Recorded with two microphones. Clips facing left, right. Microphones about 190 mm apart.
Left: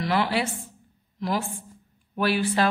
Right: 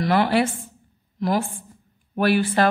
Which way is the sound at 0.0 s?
55° right (ahead or behind).